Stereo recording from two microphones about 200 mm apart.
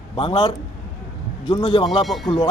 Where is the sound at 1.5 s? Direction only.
25° left (ahead or behind).